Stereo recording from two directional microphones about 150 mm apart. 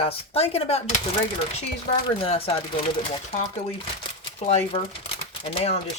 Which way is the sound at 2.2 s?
40° left (ahead or behind).